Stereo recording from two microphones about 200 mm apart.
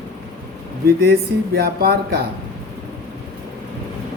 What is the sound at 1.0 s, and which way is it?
Speech, 50° right (ahead or behind).